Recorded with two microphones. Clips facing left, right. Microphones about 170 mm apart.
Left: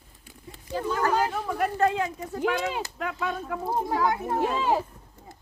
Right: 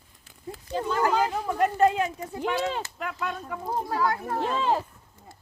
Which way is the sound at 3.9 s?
20° left (ahead or behind).